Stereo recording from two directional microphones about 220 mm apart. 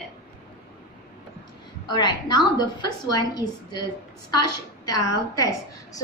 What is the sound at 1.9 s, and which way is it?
A woman's voice, 20° left (ahead or behind).